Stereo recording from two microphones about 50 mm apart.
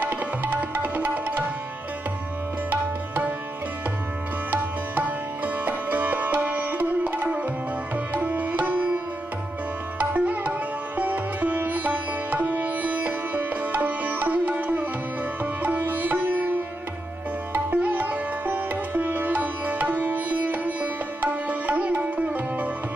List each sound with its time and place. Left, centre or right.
0.0 s music: right
2.7 s music: right
4.5 s sitar: right
9.9 s music: right
11.0 s sitar: right